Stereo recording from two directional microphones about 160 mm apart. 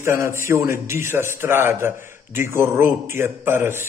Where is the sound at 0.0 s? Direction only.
15° right (ahead or behind).